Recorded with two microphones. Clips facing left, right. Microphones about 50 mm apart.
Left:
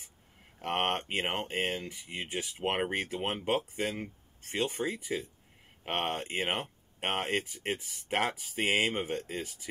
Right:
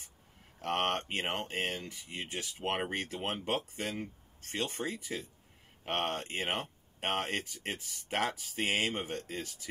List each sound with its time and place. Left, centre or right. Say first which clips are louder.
0.6 s speech: left 1 dB; centre